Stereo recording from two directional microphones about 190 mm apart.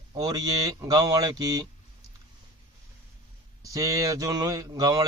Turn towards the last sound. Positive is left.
turn(degrees=-20)  # may be behind; listen again after turning